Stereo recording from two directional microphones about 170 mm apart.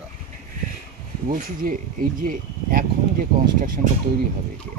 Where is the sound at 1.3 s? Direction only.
55° right (ahead or behind).